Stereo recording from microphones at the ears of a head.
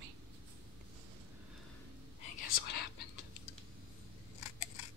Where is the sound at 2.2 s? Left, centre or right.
Left.